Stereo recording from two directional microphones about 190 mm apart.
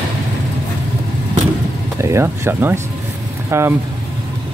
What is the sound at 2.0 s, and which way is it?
Speech, 15° right (ahead or behind).